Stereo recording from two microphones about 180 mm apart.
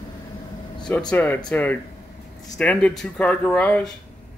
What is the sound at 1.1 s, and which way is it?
Speech, 10° left (ahead or behind).